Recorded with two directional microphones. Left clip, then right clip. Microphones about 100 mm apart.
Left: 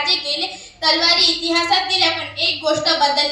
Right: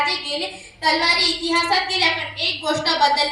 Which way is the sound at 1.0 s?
15° right (ahead or behind).